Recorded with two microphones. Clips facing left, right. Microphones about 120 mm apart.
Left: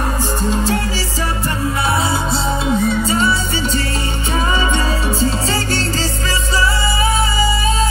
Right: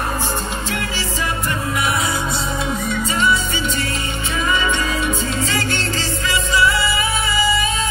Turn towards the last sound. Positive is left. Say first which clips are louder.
# left 2 dB
turn(degrees=35)  # may be behind; listen again after turning